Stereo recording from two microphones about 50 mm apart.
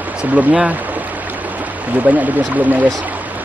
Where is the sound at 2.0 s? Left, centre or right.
Right.